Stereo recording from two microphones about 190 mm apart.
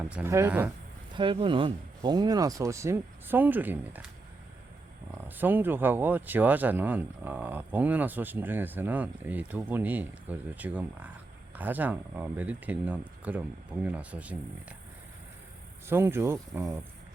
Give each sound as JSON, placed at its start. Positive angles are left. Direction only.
{"t": 0.1, "sound": "speech", "side_deg": -15}
{"t": 1.1, "sound": "speech", "side_deg": -25}
{"t": 5.1, "sound": "speech", "side_deg": -10}
{"t": 15.9, "sound": "speech", "side_deg": -10}